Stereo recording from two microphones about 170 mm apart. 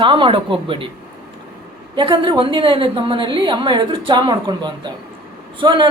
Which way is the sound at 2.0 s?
25° right (ahead or behind).